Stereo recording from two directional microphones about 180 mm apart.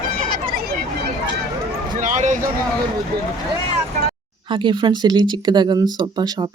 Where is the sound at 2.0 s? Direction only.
45° right (ahead or behind).